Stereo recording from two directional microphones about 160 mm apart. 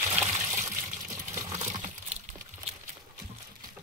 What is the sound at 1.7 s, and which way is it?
Crumpling, 45° right (ahead or behind).